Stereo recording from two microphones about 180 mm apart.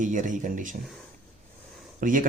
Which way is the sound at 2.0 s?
45° right (ahead or behind).